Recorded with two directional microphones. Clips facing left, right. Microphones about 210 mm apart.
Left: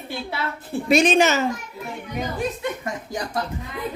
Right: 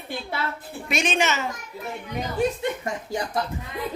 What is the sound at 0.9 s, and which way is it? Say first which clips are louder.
Speech: left 7 dB; 35° left (ahead or behind).